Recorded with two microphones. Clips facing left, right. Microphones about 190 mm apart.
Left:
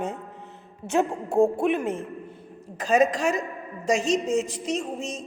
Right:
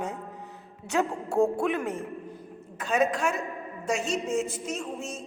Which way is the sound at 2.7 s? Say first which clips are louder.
Left 5 dB; 85° left.